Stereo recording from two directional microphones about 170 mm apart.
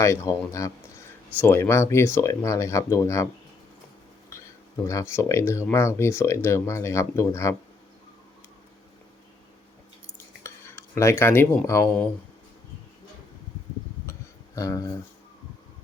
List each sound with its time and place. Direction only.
0.0 s speech: 15° left (ahead or behind)
4.3 s speech: 15° left (ahead or behind)
10.4 s speech: 15° left (ahead or behind)
14.1 s a sound: 20° left (ahead or behind)